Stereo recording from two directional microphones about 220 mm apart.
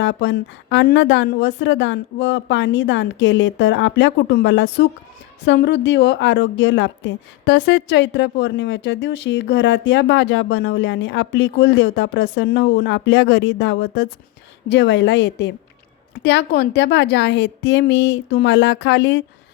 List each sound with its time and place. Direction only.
0.0 s a woman's voice: 55° left (ahead or behind)